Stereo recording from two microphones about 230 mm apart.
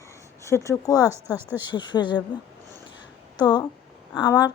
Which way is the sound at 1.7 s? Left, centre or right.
Centre.